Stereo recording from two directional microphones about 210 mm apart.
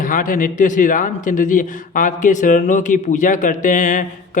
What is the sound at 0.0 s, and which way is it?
Speech, 40° left (ahead or behind).